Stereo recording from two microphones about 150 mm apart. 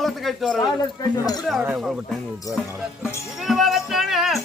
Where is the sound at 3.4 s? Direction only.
Centre (ahead or behind).